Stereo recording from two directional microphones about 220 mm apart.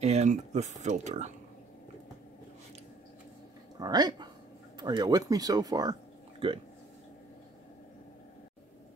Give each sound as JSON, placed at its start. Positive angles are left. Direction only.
{"t": 0.0, "sound": "speech", "side_deg": -30}
{"t": 3.8, "sound": "speech", "side_deg": -20}